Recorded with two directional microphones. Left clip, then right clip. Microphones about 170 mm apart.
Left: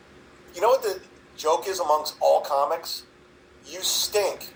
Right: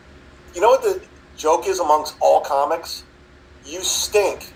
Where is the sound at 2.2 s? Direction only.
75° right (ahead or behind).